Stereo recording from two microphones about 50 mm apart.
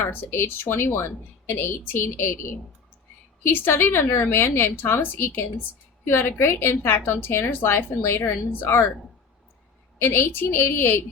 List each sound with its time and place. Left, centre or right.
0.3 s a woman's voice: left
10.0 s a woman's voice: left